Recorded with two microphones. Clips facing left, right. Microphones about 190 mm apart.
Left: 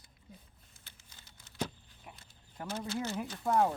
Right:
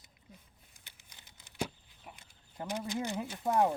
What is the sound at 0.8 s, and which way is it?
Crumpling, 15° right (ahead or behind).